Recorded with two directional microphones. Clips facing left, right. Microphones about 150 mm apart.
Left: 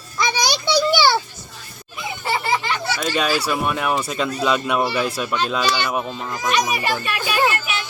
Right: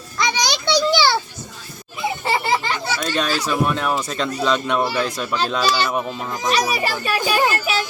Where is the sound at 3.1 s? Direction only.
10° left (ahead or behind).